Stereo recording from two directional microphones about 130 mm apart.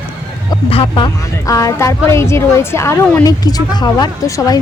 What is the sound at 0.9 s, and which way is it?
Speech, 30° left (ahead or behind).